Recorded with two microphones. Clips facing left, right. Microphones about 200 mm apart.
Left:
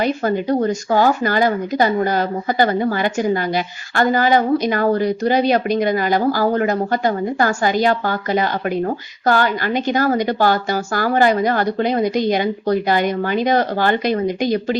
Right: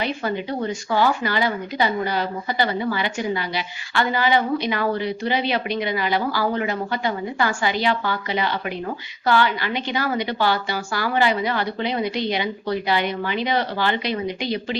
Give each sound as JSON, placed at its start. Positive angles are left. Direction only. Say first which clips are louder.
{"t": 0.0, "sound": "speech", "louder": "left 6 dB", "side_deg": 45}